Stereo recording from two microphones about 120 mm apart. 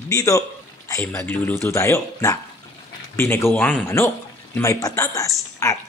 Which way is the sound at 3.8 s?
20° left (ahead or behind).